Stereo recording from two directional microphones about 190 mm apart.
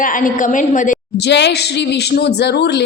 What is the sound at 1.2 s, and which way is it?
A man's voice, 65° left (ahead or behind).